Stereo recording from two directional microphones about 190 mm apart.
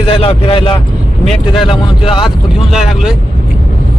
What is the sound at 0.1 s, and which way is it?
Speech, 25° left (ahead or behind).